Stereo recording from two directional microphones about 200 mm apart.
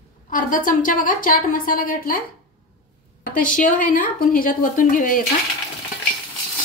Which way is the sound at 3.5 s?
40° left (ahead or behind).